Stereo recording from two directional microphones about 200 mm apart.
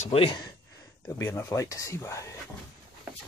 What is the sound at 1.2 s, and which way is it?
Speech, 15° left (ahead or behind).